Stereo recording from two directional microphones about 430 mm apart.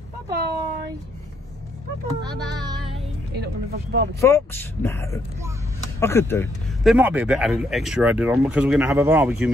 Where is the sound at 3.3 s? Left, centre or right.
Right.